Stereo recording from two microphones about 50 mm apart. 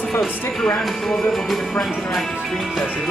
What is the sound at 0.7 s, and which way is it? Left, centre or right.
Speech, centre.